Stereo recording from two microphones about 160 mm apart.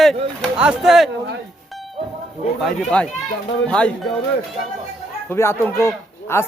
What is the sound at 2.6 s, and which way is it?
Speech, 5° left (ahead or behind).